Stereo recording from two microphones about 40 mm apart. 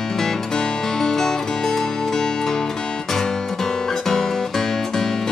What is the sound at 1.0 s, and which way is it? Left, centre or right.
Music, centre.